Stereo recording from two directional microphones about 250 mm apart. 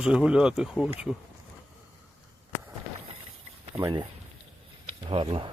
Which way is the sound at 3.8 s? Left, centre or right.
Centre.